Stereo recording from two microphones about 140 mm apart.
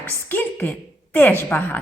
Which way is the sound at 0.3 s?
15° left (ahead or behind).